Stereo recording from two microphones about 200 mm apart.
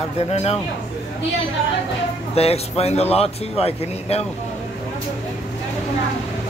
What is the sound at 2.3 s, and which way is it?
Speech, 30° left (ahead or behind).